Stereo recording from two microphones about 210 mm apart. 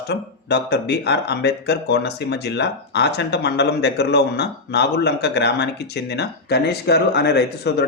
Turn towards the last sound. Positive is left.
turn(degrees=50)  # may be behind; listen again after turning